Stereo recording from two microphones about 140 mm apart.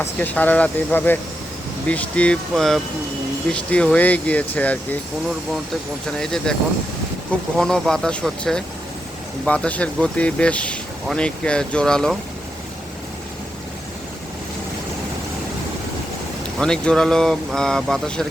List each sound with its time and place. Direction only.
0.0 s speech: 10° left (ahead or behind)
6.1 s speech: 5° left (ahead or behind)
16.6 s speech: 5° left (ahead or behind)